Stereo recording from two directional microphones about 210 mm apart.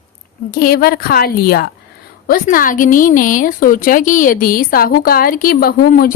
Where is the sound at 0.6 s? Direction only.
45° left (ahead or behind).